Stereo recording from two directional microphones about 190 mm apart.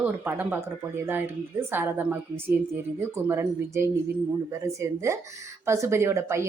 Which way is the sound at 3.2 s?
15° right (ahead or behind).